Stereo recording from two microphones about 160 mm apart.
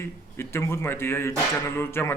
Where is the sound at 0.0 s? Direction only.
15° left (ahead or behind).